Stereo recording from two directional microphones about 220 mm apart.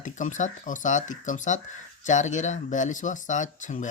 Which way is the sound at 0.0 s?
35° left (ahead or behind).